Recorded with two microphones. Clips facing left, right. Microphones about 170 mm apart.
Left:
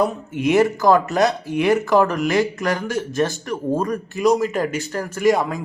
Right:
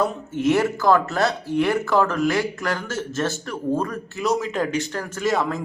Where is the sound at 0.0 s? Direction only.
15° left (ahead or behind).